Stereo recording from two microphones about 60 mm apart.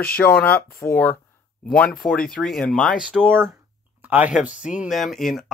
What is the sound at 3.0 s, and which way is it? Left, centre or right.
Speech, centre.